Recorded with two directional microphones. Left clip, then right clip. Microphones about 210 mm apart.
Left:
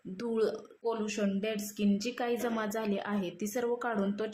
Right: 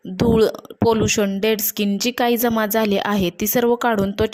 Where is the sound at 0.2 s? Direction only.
45° right (ahead or behind).